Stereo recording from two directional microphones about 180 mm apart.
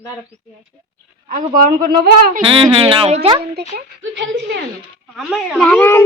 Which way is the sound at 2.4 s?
30° right (ahead or behind).